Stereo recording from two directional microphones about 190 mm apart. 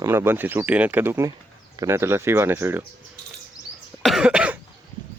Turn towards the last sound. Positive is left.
turn(degrees=-5)  # may be behind; listen again after turning